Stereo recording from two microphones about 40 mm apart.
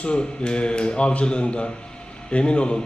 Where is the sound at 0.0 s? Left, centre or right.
Left.